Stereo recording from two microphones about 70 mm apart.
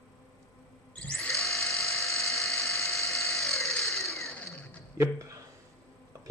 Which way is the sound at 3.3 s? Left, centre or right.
Centre.